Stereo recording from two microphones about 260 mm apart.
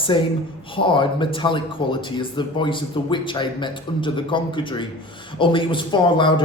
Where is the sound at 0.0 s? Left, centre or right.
Centre.